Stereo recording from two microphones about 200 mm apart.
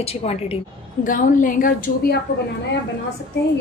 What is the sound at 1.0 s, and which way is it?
A woman's voice, 40° left (ahead or behind).